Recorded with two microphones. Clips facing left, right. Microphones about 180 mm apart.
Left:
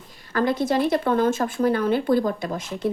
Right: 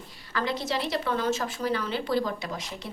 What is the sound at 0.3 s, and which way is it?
Speech, 50° left (ahead or behind).